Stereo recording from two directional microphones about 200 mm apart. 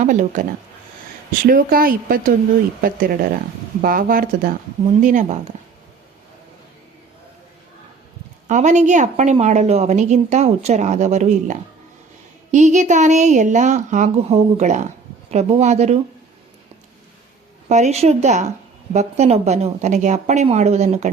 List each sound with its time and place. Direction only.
0.0 s a woman's voice: 40° right (ahead or behind)
1.5 s a woman's voice: 45° right (ahead or behind)
8.4 s a woman's voice: 35° right (ahead or behind)
17.7 s a woman's voice: 35° right (ahead or behind)